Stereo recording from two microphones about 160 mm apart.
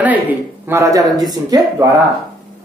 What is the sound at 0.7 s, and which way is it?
Speech, 20° right (ahead or behind).